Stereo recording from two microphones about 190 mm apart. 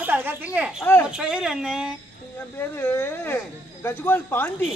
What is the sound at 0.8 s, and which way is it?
Speech, 10° left (ahead or behind).